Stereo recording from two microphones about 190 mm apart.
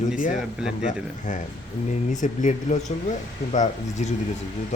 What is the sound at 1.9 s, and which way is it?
Speech, 40° left (ahead or behind).